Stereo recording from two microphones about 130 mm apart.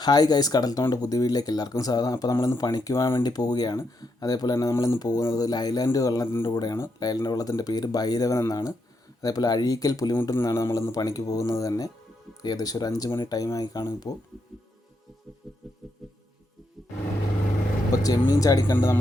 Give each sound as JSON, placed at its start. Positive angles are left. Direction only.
{"t": 0.0, "sound": "speech", "side_deg": 30}
{"t": 17.9, "sound": "a sound", "side_deg": 30}
{"t": 18.3, "sound": "speech", "side_deg": 25}